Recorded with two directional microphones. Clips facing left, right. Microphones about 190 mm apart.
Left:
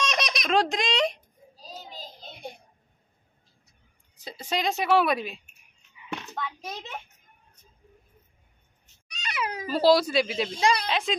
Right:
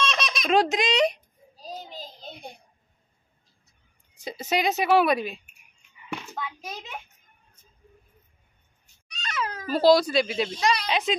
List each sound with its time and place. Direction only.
0.0 s baby laughter: 15° left (ahead or behind)
0.4 s speech: 5° right (ahead or behind)
1.7 s child singing: 50° right (ahead or behind)
4.2 s a woman's voice: 10° right (ahead or behind)
6.3 s a sound: 5° right (ahead or behind)
8.8 s cat: 15° left (ahead or behind)
9.8 s speech: 5° left (ahead or behind)